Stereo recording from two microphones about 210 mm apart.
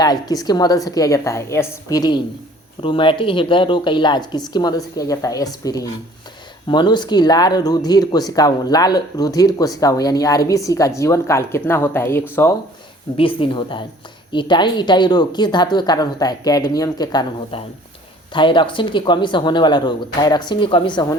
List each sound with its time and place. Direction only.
0.0 s a woman's voice: 20° left (ahead or behind)
13.1 s a woman's voice: 25° left (ahead or behind)